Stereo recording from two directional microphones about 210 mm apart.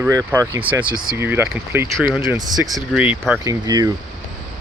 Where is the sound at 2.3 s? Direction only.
20° right (ahead or behind).